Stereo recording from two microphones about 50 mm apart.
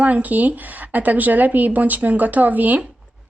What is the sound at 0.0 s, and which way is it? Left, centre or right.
Speech, right.